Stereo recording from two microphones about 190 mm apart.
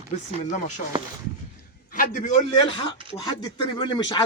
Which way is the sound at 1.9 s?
45° left (ahead or behind).